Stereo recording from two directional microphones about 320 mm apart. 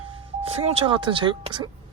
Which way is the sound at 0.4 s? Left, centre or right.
Centre.